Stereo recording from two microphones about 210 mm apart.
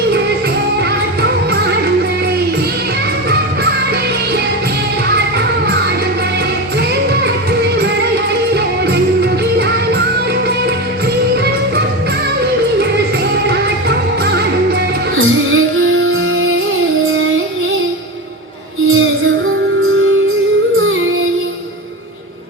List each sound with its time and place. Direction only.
9.6 s music: 55° right (ahead or behind)
15.1 s music: 70° right (ahead or behind)
18.9 s music: 70° right (ahead or behind)
20.7 s music: 70° right (ahead or behind)